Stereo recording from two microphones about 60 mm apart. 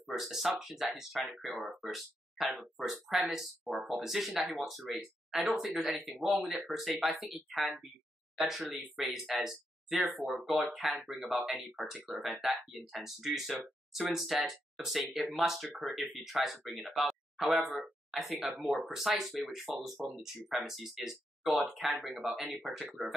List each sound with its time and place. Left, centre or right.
0.0 s speech: centre